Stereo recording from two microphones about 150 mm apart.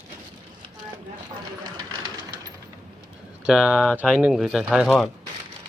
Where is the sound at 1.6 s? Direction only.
25° right (ahead or behind).